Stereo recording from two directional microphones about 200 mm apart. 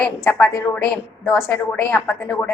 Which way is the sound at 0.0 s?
10° left (ahead or behind).